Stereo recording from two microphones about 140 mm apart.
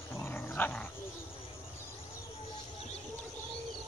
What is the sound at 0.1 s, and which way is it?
Dog, 15° left (ahead or behind).